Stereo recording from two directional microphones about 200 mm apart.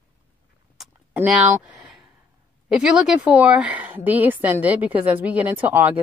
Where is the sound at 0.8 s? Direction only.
5° right (ahead or behind).